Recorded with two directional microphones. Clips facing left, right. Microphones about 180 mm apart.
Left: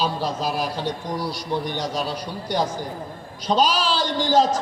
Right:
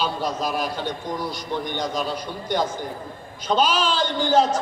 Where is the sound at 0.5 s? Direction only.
40° left (ahead or behind).